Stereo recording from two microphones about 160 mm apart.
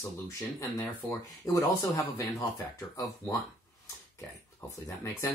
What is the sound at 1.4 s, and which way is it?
Speech, 20° left (ahead or behind).